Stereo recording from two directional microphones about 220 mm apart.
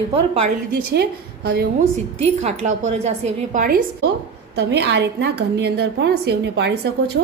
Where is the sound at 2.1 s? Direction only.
30° right (ahead or behind).